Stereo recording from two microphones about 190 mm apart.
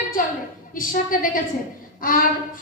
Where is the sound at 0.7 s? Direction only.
45° left (ahead or behind).